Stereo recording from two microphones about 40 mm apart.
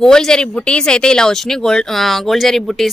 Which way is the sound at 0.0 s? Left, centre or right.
Centre.